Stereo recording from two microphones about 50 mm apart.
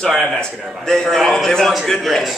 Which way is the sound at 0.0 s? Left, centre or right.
Centre.